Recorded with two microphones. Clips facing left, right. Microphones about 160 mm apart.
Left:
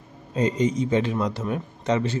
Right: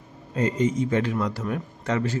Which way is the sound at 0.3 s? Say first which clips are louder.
Left 1 dB; 20° left (ahead or behind).